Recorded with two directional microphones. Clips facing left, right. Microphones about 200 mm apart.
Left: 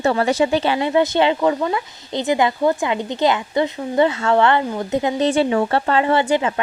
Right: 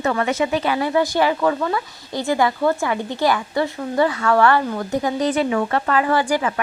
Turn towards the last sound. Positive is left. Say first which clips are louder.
# left 2 dB
turn(degrees=25)  # may be behind; listen again after turning